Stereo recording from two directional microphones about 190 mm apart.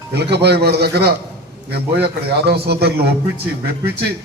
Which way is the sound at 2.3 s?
60° right (ahead or behind).